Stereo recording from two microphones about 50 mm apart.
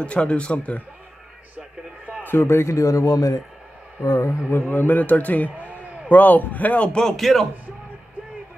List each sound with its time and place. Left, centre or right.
0.0 s speech: left
2.2 s a man's voice: left
4.5 s a man's voice: left
7.0 s speech: centre